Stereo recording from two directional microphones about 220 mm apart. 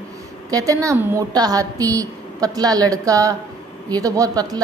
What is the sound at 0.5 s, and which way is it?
A woman's voice, 15° right (ahead or behind).